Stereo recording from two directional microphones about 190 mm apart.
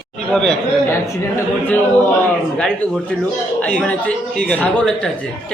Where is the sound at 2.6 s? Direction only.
5° left (ahead or behind).